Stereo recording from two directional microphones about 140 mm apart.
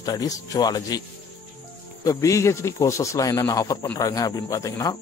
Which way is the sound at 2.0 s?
25° left (ahead or behind).